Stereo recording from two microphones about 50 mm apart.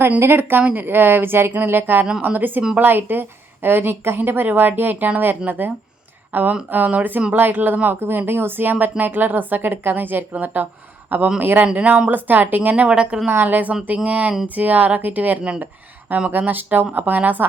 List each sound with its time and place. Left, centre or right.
0.2 s speech: right
11.6 s speech: right
13.2 s speech: right
15.6 s a sound: right
16.5 s speech: right